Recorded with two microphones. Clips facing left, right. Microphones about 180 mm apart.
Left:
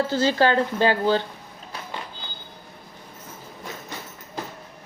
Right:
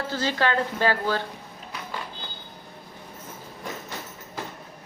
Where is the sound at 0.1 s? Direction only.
30° left (ahead or behind).